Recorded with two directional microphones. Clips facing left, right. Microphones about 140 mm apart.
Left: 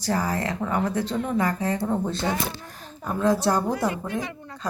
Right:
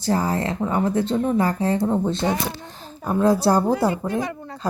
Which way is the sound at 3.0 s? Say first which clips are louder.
Right 4 dB; 35° right (ahead or behind).